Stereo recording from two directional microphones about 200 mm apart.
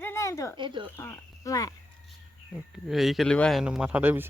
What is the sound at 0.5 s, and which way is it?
Speech, 25° right (ahead or behind).